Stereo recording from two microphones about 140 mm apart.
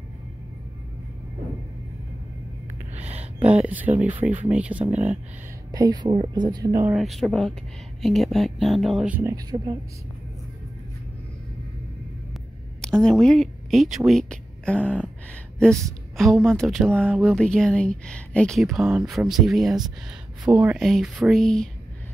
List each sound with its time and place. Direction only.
3.0 s a sound: 50° right (ahead or behind)
3.3 s speech: 10° right (ahead or behind)
5.7 s speech: 30° right (ahead or behind)
7.0 s speech: centre (ahead or behind)
9.1 s speech: 20° right (ahead or behind)
12.8 s speech: 5° left (ahead or behind)